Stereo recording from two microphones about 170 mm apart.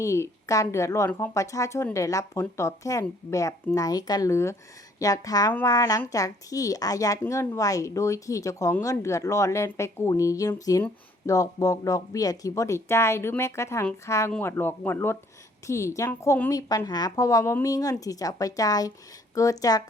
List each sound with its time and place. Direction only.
0.0 s a child's voice: 15° left (ahead or behind)